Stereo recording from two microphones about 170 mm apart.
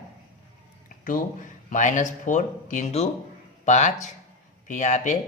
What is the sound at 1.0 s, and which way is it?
Speech, 55° left (ahead or behind).